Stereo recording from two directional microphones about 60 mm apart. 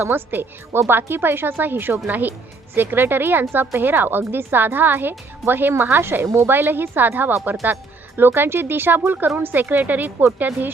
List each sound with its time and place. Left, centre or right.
0.0 s speech: right